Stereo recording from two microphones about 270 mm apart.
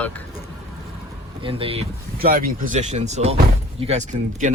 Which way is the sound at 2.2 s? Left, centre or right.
Right.